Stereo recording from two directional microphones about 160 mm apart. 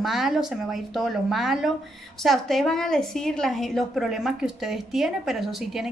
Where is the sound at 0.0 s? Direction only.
Centre (ahead or behind).